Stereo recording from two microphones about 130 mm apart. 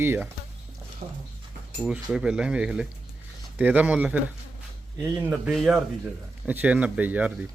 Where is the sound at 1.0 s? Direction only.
50° right (ahead or behind).